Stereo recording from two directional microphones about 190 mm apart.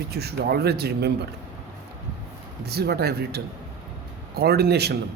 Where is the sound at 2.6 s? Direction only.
60° right (ahead or behind).